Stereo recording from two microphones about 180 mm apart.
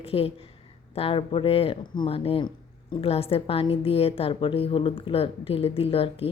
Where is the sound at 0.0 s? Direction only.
35° left (ahead or behind).